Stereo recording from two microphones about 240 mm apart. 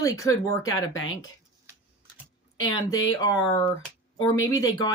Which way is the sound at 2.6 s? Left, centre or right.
Centre.